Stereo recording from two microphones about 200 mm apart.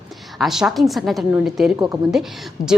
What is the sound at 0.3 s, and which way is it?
A woman's voice, centre (ahead or behind).